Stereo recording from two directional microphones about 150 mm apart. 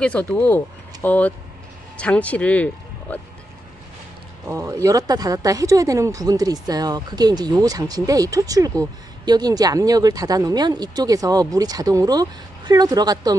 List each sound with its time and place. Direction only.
0.0 s speech: 10° left (ahead or behind)
4.5 s speech: 20° right (ahead or behind)